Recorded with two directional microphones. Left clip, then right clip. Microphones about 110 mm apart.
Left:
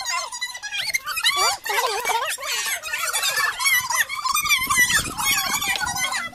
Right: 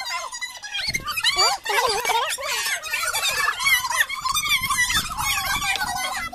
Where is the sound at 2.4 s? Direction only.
45° left (ahead or behind).